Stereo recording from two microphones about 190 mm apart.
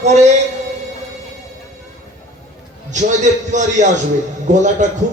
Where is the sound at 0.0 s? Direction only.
35° right (ahead or behind).